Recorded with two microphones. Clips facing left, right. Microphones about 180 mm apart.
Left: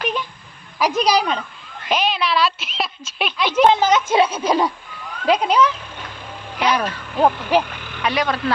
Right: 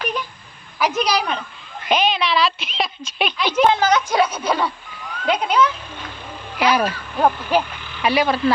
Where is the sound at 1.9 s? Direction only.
Centre (ahead or behind).